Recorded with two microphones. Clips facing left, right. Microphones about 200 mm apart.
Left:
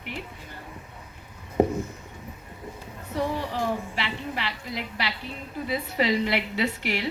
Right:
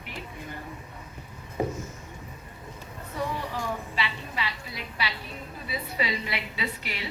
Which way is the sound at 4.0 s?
60° left (ahead or behind).